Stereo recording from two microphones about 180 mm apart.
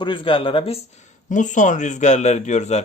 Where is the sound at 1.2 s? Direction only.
45° left (ahead or behind).